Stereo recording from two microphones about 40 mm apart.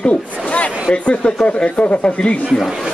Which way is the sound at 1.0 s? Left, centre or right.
Left.